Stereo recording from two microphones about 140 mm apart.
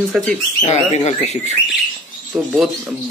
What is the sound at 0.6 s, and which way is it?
Speech, 50° left (ahead or behind).